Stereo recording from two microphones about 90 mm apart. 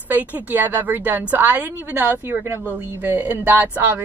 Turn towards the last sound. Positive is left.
turn(degrees=-20)  # may be behind; listen again after turning